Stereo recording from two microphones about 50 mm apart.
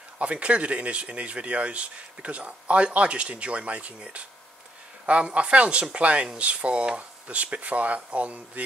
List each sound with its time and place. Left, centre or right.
0.2 s speech: right